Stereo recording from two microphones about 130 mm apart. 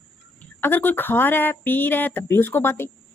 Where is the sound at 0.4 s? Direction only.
15° left (ahead or behind).